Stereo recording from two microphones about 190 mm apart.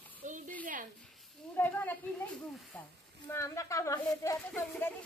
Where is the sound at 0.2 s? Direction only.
40° right (ahead or behind).